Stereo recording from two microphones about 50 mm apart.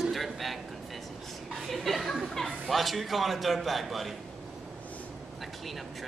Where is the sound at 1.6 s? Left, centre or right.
Centre.